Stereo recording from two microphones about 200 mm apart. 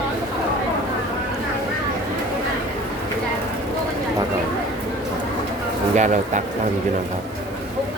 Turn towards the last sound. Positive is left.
turn(degrees=-35)  # may be behind; listen again after turning